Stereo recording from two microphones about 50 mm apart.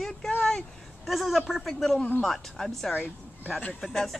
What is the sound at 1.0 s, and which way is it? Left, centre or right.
A man's voice, centre.